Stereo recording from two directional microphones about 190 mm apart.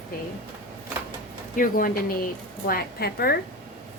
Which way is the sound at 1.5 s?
45° left (ahead or behind).